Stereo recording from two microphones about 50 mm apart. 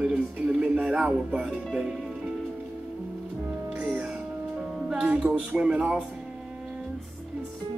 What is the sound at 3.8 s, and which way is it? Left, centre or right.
Music, right.